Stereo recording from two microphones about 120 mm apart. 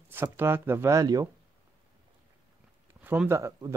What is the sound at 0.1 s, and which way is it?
Speech, 20° right (ahead or behind).